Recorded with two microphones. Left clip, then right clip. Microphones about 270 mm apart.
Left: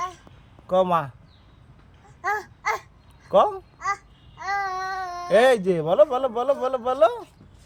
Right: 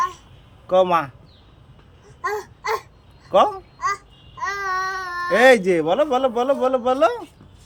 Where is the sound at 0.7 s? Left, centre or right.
Left.